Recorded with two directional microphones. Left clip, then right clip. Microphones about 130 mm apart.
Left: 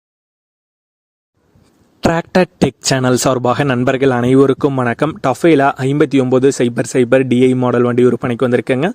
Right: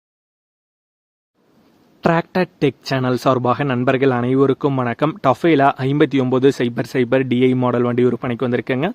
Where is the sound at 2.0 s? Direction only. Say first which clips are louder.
Left 4 dB; 85° left.